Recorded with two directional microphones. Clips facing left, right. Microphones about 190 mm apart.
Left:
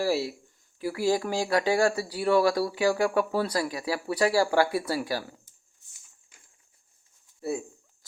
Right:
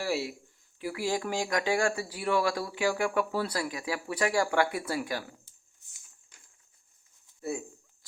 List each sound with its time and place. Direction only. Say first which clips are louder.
0.0 s speech: left 5 dB; 35° left (ahead or behind)